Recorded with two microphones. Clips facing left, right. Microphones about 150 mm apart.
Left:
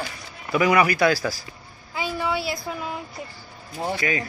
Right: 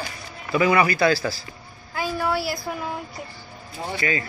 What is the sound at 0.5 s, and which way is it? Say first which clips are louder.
Speech: even; 10° left (ahead or behind).